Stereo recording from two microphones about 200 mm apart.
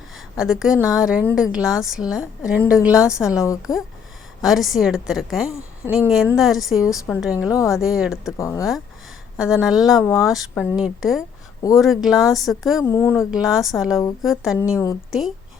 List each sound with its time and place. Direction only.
0.3 s a woman's voice: 5° right (ahead or behind)
3.3 s speech: 15° left (ahead or behind)
3.6 s a woman's voice: 5° right (ahead or behind)
8.4 s speech: 15° left (ahead or behind)
9.4 s a woman's voice: 5° right (ahead or behind)
10.0 s speech: 15° left (ahead or behind)
10.2 s a woman's voice: centre (ahead or behind)
12.8 s speech: 10° left (ahead or behind)
13.3 s a woman's voice: centre (ahead or behind)